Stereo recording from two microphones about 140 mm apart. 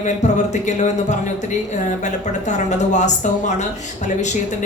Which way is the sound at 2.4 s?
60° left (ahead or behind).